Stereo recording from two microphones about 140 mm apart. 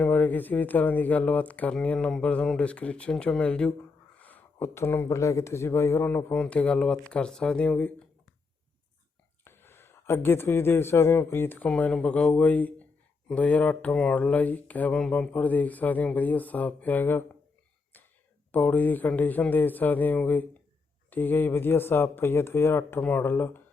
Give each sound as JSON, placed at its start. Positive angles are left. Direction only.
{"t": 0.0, "sound": "speech", "side_deg": 10}
{"t": 9.4, "sound": "a man's voice", "side_deg": 15}
{"t": 17.9, "sound": "a sound", "side_deg": 15}
{"t": 18.5, "sound": "speech", "side_deg": 10}